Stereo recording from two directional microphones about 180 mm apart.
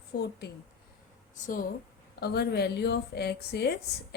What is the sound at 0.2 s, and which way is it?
Speech, 70° left (ahead or behind).